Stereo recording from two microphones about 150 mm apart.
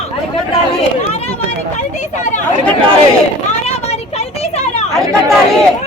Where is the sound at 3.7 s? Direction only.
45° left (ahead or behind).